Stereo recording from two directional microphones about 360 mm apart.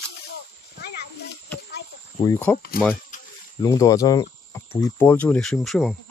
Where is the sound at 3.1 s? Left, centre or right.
Left.